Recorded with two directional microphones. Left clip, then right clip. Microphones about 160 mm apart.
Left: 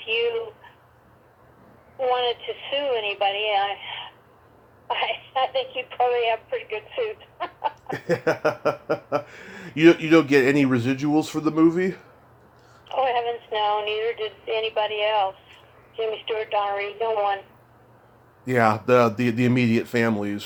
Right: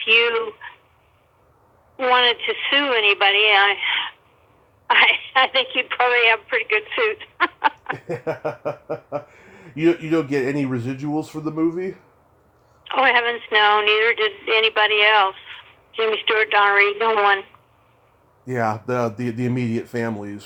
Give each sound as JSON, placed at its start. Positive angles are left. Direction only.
{"t": 0.1, "sound": "a sound", "side_deg": -35}
{"t": 2.0, "sound": "speech", "side_deg": -35}
{"t": 7.9, "sound": "speech", "side_deg": 15}
{"t": 12.9, "sound": "speech", "side_deg": -35}
{"t": 18.4, "sound": "speech", "side_deg": 10}